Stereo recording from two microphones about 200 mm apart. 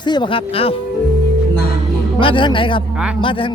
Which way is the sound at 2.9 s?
5° right (ahead or behind).